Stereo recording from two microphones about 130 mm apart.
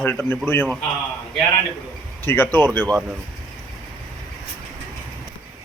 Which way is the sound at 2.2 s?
15° left (ahead or behind).